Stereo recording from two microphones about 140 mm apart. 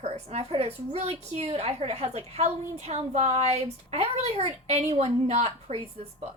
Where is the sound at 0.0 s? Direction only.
50° right (ahead or behind).